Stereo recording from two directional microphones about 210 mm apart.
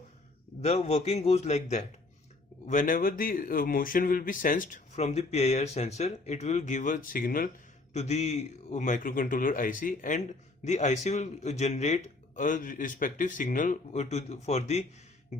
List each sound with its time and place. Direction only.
0.6 s speech: 30° left (ahead or behind)
7.9 s speech: 30° left (ahead or behind)